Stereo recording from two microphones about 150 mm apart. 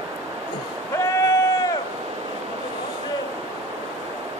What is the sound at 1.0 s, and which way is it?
Vehicle, 20° left (ahead or behind).